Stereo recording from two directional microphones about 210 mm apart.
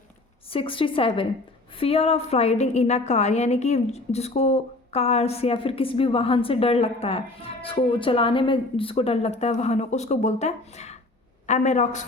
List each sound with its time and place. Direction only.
0.5 s a woman's voice: 25° left (ahead or behind)